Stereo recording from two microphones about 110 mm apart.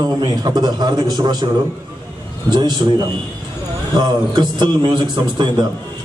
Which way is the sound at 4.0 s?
45° right (ahead or behind).